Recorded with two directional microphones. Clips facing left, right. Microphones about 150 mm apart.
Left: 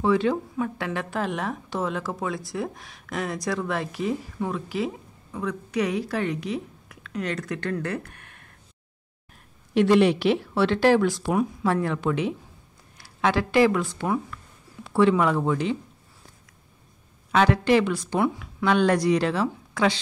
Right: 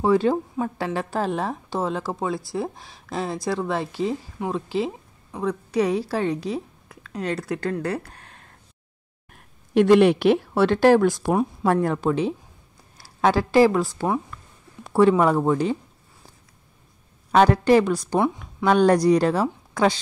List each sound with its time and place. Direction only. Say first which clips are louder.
0.0 s a woman's voice: right 3 dB; 40° right (ahead or behind)
9.8 s speech: right 3 dB; 55° right (ahead or behind)
17.3 s speech: right 4 dB; 40° right (ahead or behind)